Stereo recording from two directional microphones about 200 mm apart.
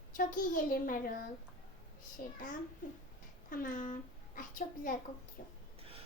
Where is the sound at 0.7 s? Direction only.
45° left (ahead or behind).